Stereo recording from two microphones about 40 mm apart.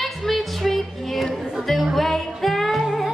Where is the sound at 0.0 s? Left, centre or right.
Centre.